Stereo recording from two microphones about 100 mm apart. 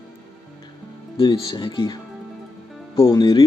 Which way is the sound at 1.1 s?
50° left (ahead or behind).